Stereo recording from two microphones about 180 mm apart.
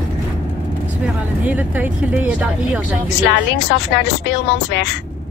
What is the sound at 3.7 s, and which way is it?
Speech, 70° left (ahead or behind).